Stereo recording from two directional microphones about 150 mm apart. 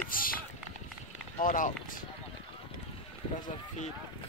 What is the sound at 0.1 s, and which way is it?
Run, 70° left (ahead or behind).